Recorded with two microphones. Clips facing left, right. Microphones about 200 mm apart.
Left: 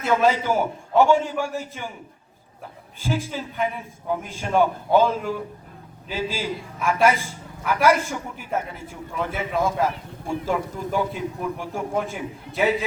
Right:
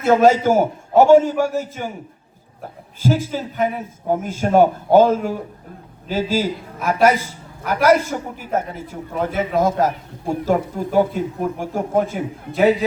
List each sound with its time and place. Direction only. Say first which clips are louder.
0.0 s a man's voice: right 7 dB; 40° right (ahead or behind)
3.0 s a man's voice: right 7 dB; 40° right (ahead or behind)